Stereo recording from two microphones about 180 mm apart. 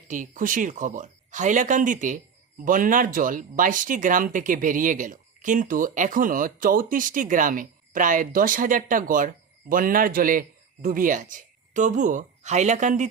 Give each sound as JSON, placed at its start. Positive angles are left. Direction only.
{"t": 0.1, "sound": "a woman's voice", "side_deg": -45}